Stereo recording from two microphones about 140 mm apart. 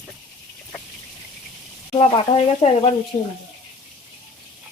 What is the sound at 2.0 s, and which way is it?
Speech, 40° left (ahead or behind).